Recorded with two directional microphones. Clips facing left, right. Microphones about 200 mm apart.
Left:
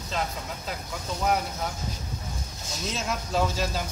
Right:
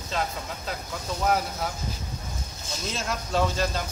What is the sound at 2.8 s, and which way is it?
Speech, centre (ahead or behind).